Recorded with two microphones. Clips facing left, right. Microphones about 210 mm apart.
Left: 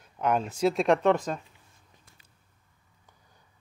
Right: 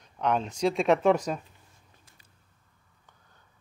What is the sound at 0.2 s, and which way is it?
Speech, 5° left (ahead or behind).